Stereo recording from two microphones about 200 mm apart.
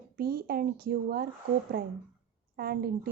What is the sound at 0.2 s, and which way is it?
Speech, 50° right (ahead or behind).